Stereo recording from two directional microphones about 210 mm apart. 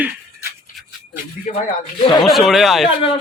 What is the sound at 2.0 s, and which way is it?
Speech, 20° left (ahead or behind).